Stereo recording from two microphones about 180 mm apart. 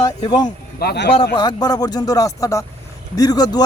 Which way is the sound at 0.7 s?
65° left (ahead or behind).